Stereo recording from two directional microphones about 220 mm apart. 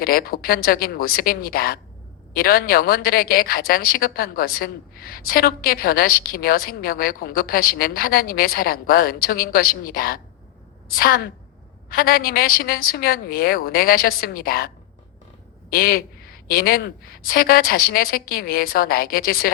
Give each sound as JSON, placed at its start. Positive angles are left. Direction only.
{"t": 0.0, "sound": "a woman's voice", "side_deg": 45}
{"t": 15.7, "sound": "a woman's voice", "side_deg": 40}